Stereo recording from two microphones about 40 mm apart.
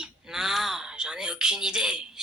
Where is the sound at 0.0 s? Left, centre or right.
Centre.